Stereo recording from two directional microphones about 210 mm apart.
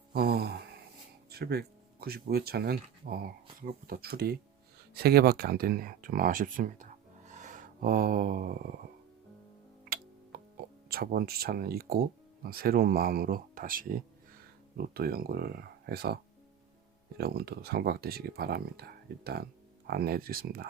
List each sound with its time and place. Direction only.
0.1 s a sound: 50° right (ahead or behind)
1.3 s speech: 50° right (ahead or behind)
7.3 s a sound: 35° right (ahead or behind)
10.3 s music: 45° right (ahead or behind)
10.8 s speech: 45° right (ahead or behind)
17.2 s speech: 50° right (ahead or behind)